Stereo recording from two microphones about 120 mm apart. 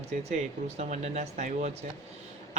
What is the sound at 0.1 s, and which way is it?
Speech, 65° right (ahead or behind).